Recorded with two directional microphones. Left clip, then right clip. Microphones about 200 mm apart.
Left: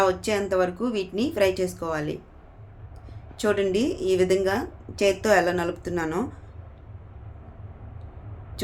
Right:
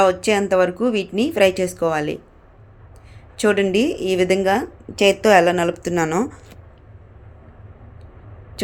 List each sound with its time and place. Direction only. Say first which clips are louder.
0.0 s speech: right 7 dB; 35° right (ahead or behind)
3.3 s a woman's voice: right 6 dB; 35° right (ahead or behind)
8.6 s speech: right 6 dB; 30° right (ahead or behind)